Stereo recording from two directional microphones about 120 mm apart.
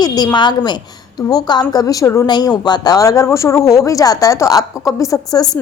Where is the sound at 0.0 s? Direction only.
35° left (ahead or behind).